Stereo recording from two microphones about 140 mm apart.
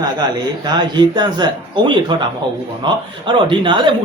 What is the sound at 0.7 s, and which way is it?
Speech, 30° right (ahead or behind).